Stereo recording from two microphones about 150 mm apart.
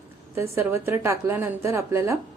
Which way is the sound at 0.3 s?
15° right (ahead or behind).